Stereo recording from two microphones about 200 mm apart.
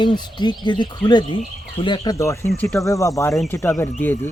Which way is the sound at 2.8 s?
15° left (ahead or behind).